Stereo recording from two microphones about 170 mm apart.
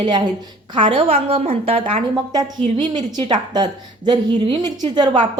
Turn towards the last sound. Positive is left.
turn(degrees=-25)  # may be behind; listen again after turning